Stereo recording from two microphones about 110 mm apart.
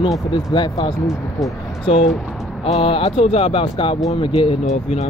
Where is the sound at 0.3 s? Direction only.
45° left (ahead or behind).